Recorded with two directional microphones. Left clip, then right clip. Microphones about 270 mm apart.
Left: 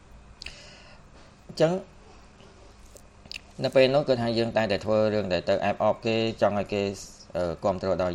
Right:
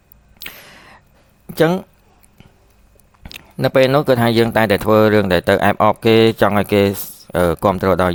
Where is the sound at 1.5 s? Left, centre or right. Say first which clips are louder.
Right 8 dB; right.